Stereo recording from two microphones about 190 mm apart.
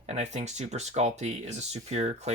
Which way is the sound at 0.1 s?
35° right (ahead or behind).